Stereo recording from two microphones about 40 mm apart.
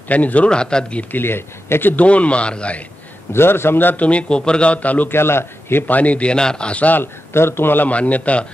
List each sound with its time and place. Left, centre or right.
0.1 s a man's voice: left
0.5 s speech: left
1.1 s speech: left
2.0 s a man's voice: left
3.3 s speech: left
3.9 s a man's voice: left
5.1 s speech: left
5.9 s a man's voice: left
6.3 s speech: left
7.0 s speech: left
7.8 s a man's voice: left